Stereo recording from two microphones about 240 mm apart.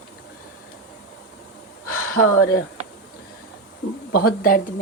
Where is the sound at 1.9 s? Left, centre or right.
Left.